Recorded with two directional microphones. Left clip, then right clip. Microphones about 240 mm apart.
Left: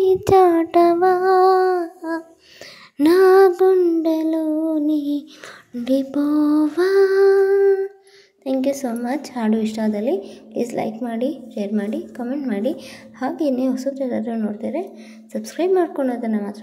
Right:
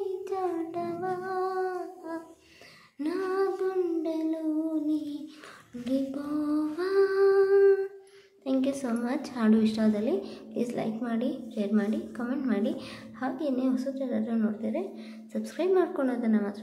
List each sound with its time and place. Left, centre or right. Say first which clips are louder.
0.2 s child singing: left 18 dB; left
5.9 s lullaby: left 12 dB; left
8.5 s a woman's voice: left 8 dB; centre